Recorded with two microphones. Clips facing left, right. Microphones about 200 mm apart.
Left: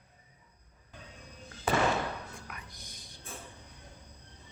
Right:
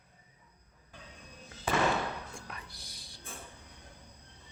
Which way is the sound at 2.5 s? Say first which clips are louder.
Even; 35° right (ahead or behind).